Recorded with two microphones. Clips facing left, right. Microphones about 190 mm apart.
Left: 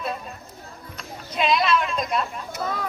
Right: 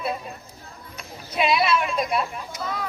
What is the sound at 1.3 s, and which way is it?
Speech, 10° right (ahead or behind).